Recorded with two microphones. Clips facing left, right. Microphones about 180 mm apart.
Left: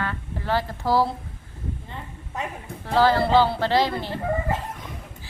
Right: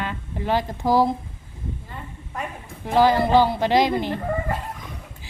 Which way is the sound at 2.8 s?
15° right (ahead or behind).